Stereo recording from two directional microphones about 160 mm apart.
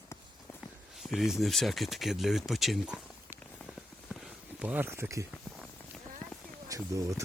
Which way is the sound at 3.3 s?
5° right (ahead or behind).